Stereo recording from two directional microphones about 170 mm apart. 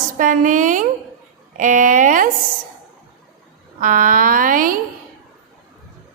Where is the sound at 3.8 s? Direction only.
55° right (ahead or behind).